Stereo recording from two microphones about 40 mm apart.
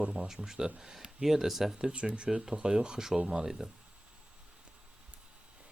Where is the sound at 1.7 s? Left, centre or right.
Right.